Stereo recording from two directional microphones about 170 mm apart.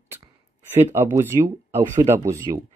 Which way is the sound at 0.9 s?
15° right (ahead or behind).